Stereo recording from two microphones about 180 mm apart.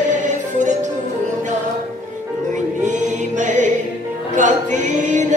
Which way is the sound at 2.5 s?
40° right (ahead or behind).